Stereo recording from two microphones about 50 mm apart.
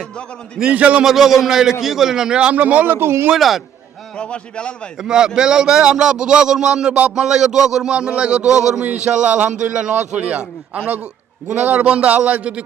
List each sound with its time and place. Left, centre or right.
0.7 s a man's voice: right
1.0 s a man's voice: centre
2.5 s a man's voice: right
3.0 s speech: right
3.3 s a man's voice: centre
4.2 s a man's voice: left
5.0 s a man's voice: centre
8.8 s a man's voice: right
11.4 s a man's voice: right